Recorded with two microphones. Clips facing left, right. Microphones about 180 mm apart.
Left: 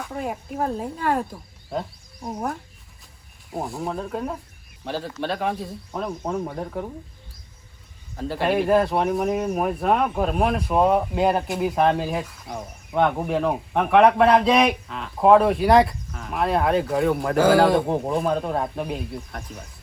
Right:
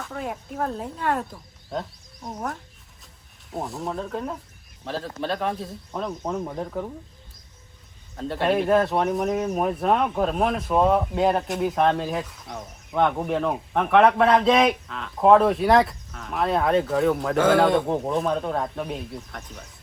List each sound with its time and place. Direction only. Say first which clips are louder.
0.1 s speech: left 2 dB; 5° left (ahead or behind)
3.5 s speech: left 1 dB; centre (ahead or behind)
8.1 s speech: even; centre (ahead or behind)